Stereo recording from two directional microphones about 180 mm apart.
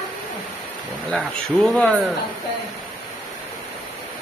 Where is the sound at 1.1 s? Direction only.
5° left (ahead or behind).